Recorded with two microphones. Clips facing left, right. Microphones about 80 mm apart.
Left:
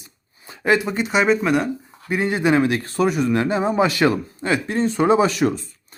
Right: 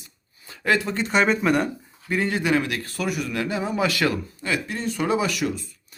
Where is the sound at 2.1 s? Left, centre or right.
Left.